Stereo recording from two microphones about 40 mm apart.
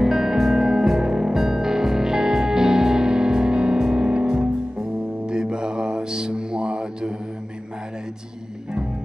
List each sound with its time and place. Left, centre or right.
0.0 s music: centre